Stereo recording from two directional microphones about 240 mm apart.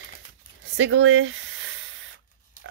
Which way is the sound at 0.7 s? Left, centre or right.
Right.